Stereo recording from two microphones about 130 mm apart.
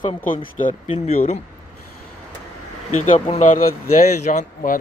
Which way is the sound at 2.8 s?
65° left (ahead or behind).